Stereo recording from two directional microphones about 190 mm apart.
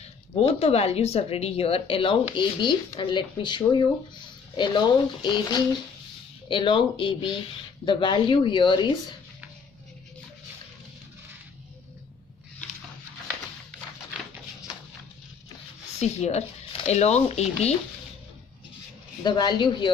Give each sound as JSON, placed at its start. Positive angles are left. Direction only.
{"t": 0.0, "sound": "a woman's voice", "side_deg": 35}
{"t": 16.0, "sound": "a woman's voice", "side_deg": 35}
{"t": 19.2, "sound": "speech", "side_deg": 25}